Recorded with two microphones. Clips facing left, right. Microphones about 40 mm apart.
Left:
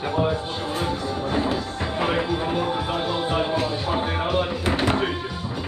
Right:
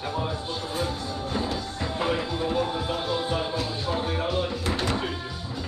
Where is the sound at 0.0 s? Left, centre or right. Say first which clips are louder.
Left 7 dB; left.